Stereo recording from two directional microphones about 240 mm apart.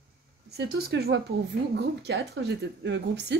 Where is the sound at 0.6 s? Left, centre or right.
Right.